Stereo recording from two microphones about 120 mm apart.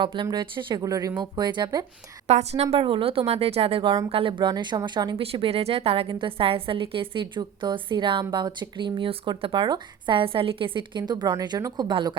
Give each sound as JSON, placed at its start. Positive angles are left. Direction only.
{"t": 0.0, "sound": "speech", "side_deg": -40}
{"t": 2.2, "sound": "speech", "side_deg": -65}
{"t": 5.2, "sound": "a woman's voice", "side_deg": -55}